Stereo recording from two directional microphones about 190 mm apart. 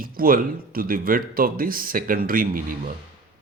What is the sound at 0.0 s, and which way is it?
A man's voice, 50° right (ahead or behind).